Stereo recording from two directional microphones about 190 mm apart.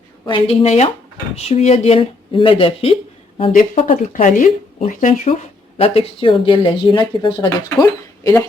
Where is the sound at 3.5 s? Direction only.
40° left (ahead or behind).